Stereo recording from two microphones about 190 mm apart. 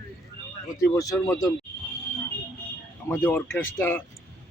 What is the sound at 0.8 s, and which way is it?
Speech, 15° left (ahead or behind).